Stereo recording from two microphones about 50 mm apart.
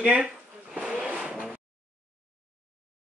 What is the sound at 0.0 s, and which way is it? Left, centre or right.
Speech, right.